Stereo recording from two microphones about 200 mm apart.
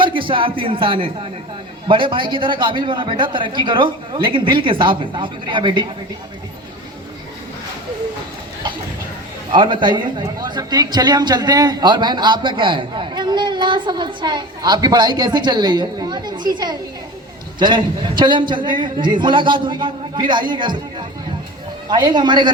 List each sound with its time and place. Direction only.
0.0 s a man's voice: 25° right (ahead or behind)
9.5 s a man's voice: 25° right (ahead or behind)
21.8 s a man's voice: 20° right (ahead or behind)